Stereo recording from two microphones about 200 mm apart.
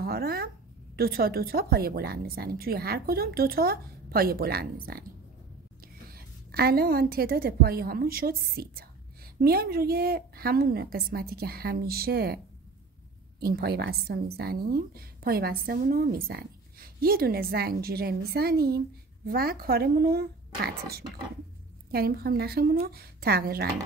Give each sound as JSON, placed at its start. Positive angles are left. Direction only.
{"t": 0.0, "sound": "a woman's voice", "side_deg": -50}
{"t": 6.0, "sound": "a woman's voice", "side_deg": -50}
{"t": 13.4, "sound": "a woman's voice", "side_deg": -50}